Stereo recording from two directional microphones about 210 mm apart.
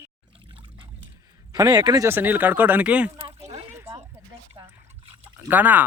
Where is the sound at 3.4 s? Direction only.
30° right (ahead or behind).